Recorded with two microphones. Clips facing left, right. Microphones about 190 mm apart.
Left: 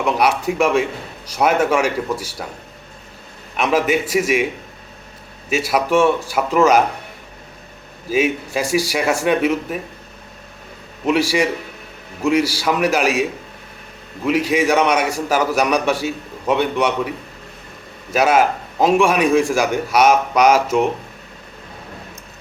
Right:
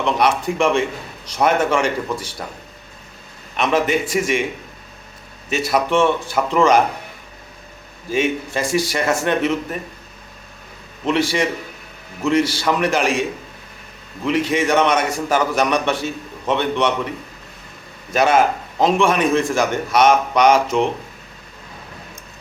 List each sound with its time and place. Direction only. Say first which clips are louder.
0.0 s a man's voice: left 1 dB; 10° left (ahead or behind)
3.6 s a man's voice: left 1 dB; 5° left (ahead or behind)
5.5 s a man's voice: left 1 dB; 10° left (ahead or behind)
8.1 s a man's voice: left 2 dB; 5° left (ahead or behind)
11.0 s a man's voice: left 2 dB; 10° left (ahead or behind)
14.3 s a man's voice: left 2 dB; 5° left (ahead or behind)